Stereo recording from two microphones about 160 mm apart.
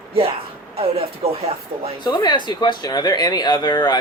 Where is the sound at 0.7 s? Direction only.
40° right (ahead or behind).